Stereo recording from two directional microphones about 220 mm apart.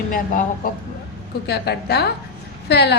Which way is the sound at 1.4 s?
50° left (ahead or behind).